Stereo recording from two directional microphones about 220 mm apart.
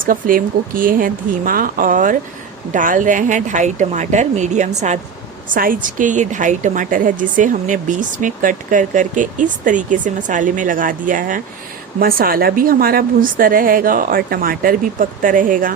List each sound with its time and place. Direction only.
0.0 s a woman's voice: 40° right (ahead or behind)